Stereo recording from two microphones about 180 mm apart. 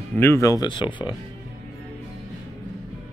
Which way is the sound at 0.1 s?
15° left (ahead or behind).